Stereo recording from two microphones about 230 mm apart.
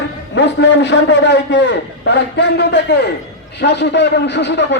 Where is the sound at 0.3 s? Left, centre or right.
Left.